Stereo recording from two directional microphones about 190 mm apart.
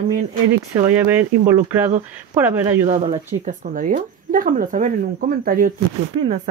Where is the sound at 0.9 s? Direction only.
10° right (ahead or behind).